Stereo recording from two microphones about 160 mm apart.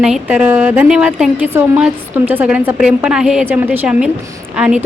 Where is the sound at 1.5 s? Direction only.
15° right (ahead or behind).